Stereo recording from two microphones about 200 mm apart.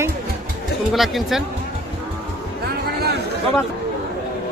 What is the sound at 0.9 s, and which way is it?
Speech, centre (ahead or behind).